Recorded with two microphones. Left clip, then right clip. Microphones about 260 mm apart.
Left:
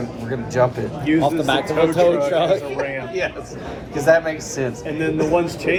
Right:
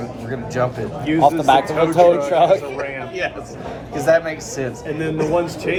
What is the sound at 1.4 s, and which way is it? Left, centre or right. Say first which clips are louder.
A man's voice: right 3 dB; right.